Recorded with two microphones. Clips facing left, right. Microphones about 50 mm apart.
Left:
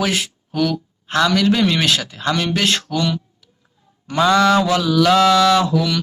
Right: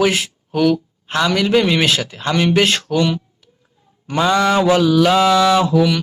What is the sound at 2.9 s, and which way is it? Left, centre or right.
Speech, centre.